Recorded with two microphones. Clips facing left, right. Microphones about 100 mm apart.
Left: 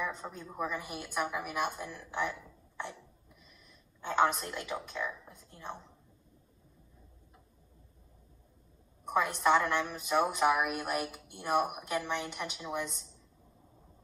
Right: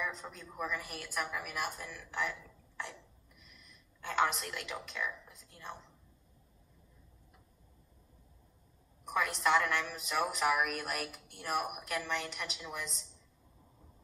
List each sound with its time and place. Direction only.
0.0 s a woman's voice: 20° left (ahead or behind)
4.0 s a woman's voice: 20° left (ahead or behind)
9.1 s a woman's voice: 20° left (ahead or behind)